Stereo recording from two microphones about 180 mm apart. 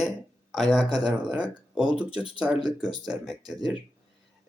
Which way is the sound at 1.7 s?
5° right (ahead or behind).